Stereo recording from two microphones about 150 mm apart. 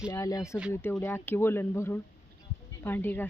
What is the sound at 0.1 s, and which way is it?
A woman's voice, 25° left (ahead or behind).